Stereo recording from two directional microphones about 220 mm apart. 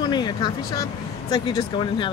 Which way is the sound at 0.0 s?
20° left (ahead or behind).